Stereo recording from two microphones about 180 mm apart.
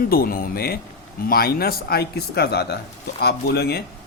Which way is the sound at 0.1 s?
55° left (ahead or behind).